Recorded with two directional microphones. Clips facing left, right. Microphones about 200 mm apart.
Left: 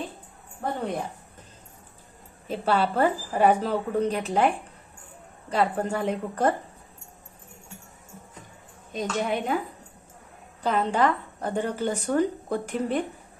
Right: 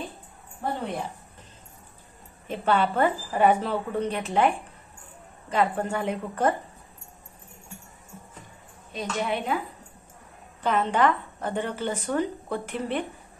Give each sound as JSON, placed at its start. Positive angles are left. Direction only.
{"t": 2.4, "sound": "speech", "side_deg": 35}
{"t": 5.5, "sound": "speech", "side_deg": 35}
{"t": 8.9, "sound": "a woman's voice", "side_deg": 45}
{"t": 10.6, "sound": "speech", "side_deg": 35}